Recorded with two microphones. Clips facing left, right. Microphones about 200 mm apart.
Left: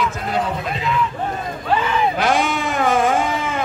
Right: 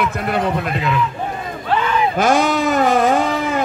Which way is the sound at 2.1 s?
45° right (ahead or behind).